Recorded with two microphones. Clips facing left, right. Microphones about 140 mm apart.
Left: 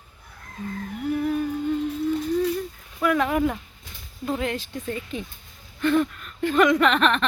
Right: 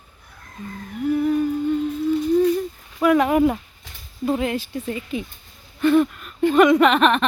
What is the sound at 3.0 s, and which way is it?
Speech, 20° right (ahead or behind).